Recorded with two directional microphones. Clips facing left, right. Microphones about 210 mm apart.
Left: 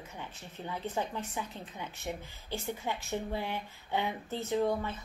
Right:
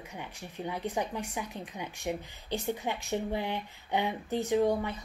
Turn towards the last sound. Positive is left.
turn(degrees=-15)  # may be behind; listen again after turning